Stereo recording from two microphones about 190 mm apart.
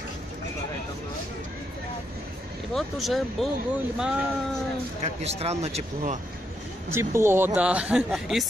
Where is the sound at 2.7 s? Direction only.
Centre (ahead or behind).